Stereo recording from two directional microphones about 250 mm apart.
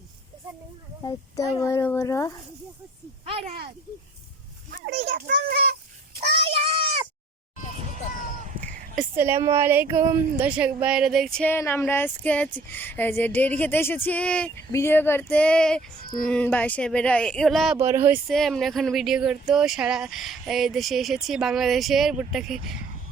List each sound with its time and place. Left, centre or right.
1.0 s speech: centre
3.2 s speech: right
4.7 s a child's voice: right
6.1 s child singing: right
9.1 s speech: centre
17.7 s speech: centre